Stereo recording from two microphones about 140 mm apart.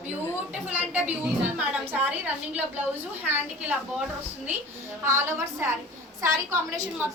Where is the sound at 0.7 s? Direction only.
10° right (ahead or behind).